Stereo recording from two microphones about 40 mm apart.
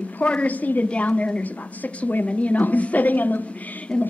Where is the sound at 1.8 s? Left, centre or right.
Left.